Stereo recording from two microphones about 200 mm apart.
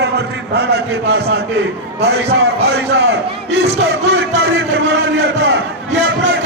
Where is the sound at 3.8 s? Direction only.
60° right (ahead or behind).